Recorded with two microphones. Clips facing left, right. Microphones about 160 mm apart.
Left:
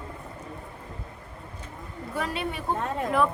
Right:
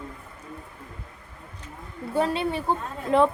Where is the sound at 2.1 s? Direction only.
30° right (ahead or behind).